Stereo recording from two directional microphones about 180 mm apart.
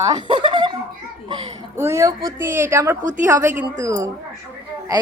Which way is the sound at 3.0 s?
45° right (ahead or behind).